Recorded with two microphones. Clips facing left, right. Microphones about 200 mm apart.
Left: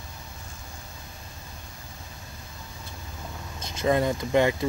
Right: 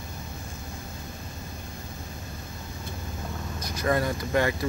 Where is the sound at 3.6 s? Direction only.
20° left (ahead or behind).